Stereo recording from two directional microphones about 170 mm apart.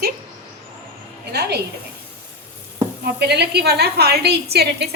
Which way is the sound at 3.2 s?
75° right (ahead or behind).